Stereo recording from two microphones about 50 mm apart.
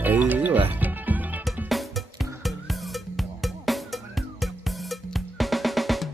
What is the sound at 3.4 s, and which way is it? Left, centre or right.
Music, centre.